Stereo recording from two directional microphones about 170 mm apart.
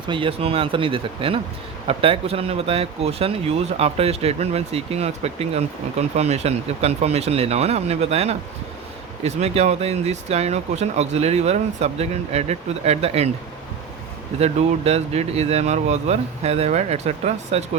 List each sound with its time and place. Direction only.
0.1 s speech: 30° right (ahead or behind)
14.3 s speech: 40° right (ahead or behind)